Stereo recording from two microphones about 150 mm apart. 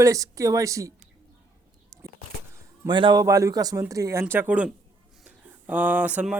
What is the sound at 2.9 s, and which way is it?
Speech, 30° right (ahead or behind).